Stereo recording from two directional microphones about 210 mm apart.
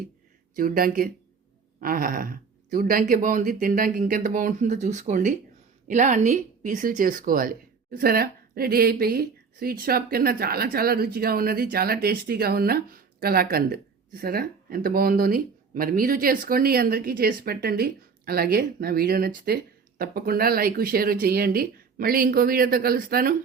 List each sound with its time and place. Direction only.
0.5 s speech: 40° right (ahead or behind)